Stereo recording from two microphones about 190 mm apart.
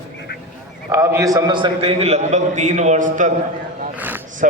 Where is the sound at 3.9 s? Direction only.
10° right (ahead or behind).